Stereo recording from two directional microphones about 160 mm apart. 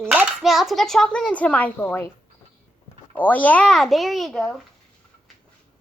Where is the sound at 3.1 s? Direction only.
10° left (ahead or behind).